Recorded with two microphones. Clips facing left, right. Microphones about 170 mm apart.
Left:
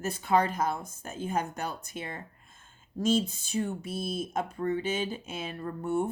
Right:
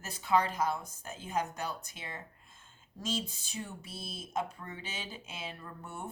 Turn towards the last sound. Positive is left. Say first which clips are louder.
# left 14 dB
turn(degrees=50)  # may be behind; listen again after turning